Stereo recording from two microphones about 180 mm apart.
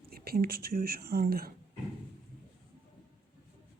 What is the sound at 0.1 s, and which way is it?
Speech, 55° right (ahead or behind).